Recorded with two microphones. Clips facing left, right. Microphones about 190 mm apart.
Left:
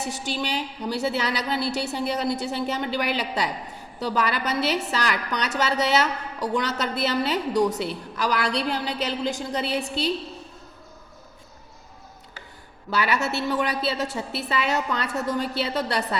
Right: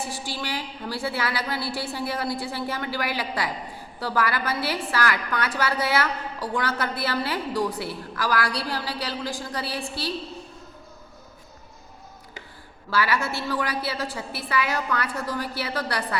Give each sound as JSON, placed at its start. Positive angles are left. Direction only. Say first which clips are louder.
{"t": 0.0, "sound": "a woman's voice", "louder": "left 3 dB", "side_deg": 20}
{"t": 12.9, "sound": "a woman's voice", "louder": "left 1 dB", "side_deg": 20}